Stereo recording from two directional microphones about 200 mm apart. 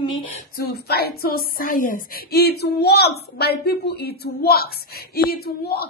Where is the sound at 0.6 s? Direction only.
50° left (ahead or behind).